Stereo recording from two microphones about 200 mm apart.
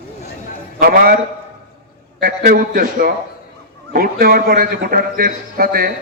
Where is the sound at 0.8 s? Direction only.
45° right (ahead or behind).